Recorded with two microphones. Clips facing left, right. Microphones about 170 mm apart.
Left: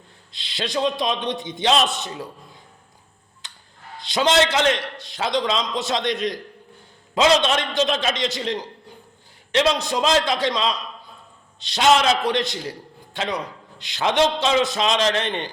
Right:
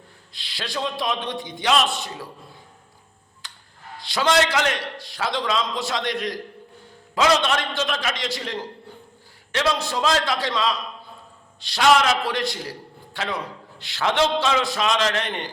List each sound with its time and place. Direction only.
0.3 s a man's voice: 20° left (ahead or behind)
3.4 s a sound: 20° left (ahead or behind)
3.9 s a man's voice: 20° left (ahead or behind)